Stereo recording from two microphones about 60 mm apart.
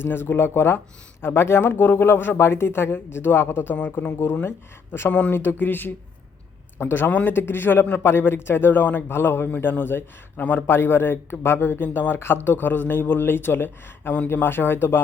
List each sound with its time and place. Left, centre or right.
0.0 s a man's voice: left